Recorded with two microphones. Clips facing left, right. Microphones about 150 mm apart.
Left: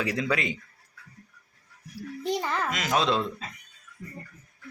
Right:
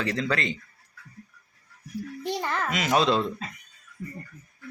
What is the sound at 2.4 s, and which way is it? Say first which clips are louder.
Speech: right 1 dB; centre (ahead or behind).